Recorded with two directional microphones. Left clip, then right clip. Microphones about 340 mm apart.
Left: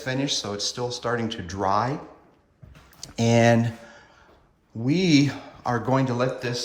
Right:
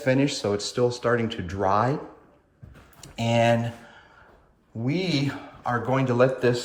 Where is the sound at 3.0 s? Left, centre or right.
Centre.